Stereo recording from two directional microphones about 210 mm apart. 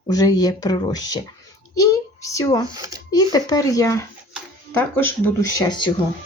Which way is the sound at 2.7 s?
15° right (ahead or behind).